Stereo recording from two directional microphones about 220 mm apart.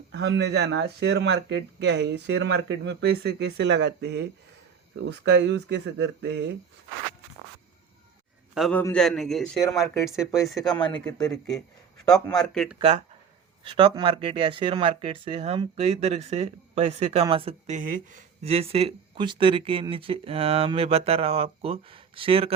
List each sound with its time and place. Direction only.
0.1 s speech: 55° right (ahead or behind)
8.5 s a man's voice: centre (ahead or behind)
10.8 s speech: 20° left (ahead or behind)
11.0 s a man's voice: 5° left (ahead or behind)
13.7 s speech: 20° right (ahead or behind)